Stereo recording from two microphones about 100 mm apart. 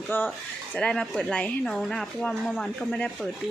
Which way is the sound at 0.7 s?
5° left (ahead or behind).